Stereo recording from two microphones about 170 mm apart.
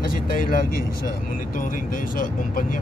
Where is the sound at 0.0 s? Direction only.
55° left (ahead or behind).